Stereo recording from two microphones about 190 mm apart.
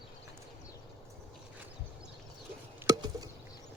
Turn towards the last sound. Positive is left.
turn(degrees=-20)  # may be behind; listen again after turning